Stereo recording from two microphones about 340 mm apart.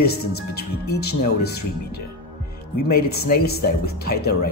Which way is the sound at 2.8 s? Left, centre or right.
Left.